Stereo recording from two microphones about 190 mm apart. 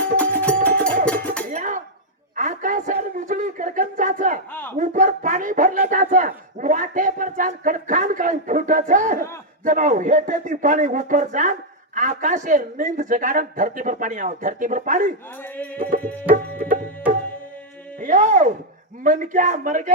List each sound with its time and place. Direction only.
0.2 s music: 10° left (ahead or behind)
1.5 s chink: 40° right (ahead or behind)
2.3 s a sound: 40° right (ahead or behind)
4.8 s a man's voice: 40° right (ahead or behind)
15.4 s music: 10° left (ahead or behind)
16.3 s tabla: 45° right (ahead or behind)
18.0 s a man's voice: 40° right (ahead or behind)